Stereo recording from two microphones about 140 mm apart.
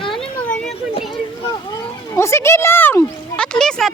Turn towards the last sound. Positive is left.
turn(degrees=5)  # may be behind; listen again after turning